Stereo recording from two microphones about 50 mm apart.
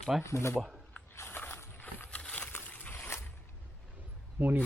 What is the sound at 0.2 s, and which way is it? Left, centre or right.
Speech, left.